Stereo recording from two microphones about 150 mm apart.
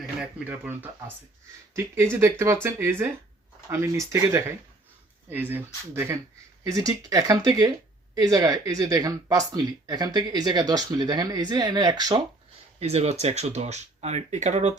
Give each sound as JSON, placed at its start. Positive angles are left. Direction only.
{"t": 0.2, "sound": "speech", "side_deg": -10}
{"t": 2.7, "sound": "speech", "side_deg": -15}
{"t": 12.8, "sound": "speech", "side_deg": -45}